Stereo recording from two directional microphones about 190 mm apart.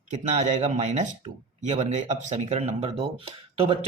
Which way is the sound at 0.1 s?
40° right (ahead or behind).